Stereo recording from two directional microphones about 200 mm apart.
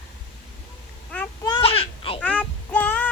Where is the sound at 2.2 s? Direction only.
5° left (ahead or behind).